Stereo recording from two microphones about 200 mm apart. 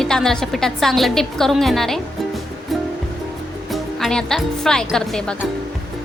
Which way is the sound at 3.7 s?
Centre (ahead or behind).